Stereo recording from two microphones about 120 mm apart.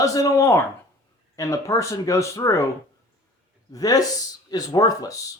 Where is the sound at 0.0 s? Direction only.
30° left (ahead or behind).